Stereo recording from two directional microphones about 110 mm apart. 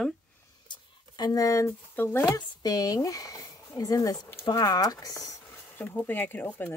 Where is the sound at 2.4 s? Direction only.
35° left (ahead or behind).